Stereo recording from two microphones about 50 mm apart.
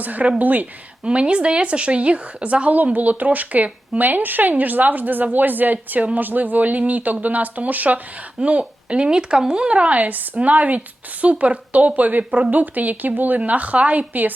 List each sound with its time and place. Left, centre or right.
0.0 s speech: right
1.0 s speech: right